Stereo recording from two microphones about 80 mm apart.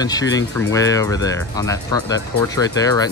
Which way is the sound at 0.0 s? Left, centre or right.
Left.